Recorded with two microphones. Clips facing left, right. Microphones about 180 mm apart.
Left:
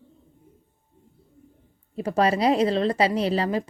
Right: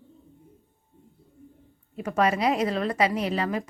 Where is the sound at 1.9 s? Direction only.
30° left (ahead or behind).